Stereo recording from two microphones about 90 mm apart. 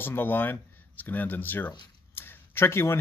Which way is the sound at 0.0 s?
25° left (ahead or behind).